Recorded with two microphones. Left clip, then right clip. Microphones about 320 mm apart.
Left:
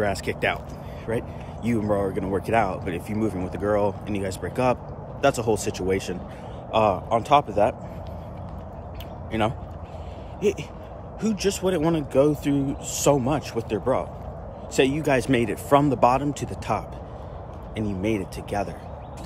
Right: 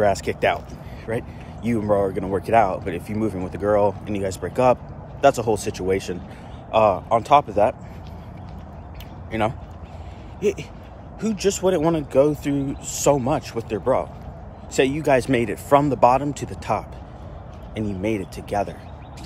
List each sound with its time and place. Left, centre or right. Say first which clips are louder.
0.0 s speech: right 5 dB; centre
9.3 s speech: right 2 dB; centre